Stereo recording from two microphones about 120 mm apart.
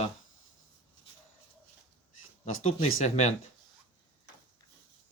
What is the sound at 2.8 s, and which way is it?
Speech, 65° left (ahead or behind).